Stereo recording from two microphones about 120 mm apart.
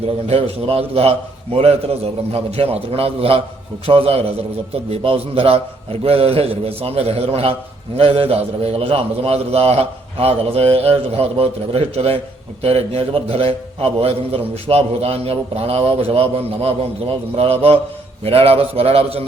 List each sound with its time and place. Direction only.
0.3 s a man's voice: 55° right (ahead or behind)